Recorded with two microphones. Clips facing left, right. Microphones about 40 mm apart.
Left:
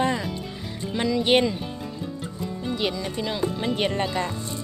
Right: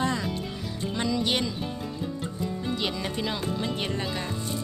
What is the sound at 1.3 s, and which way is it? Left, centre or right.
Speech, left.